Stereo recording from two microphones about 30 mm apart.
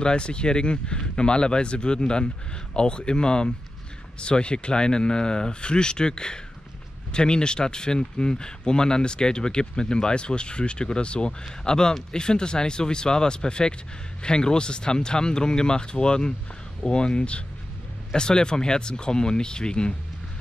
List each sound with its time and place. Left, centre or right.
0.0 s speech: left